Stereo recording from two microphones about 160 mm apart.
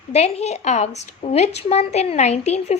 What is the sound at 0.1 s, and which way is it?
A woman's voice, 40° left (ahead or behind).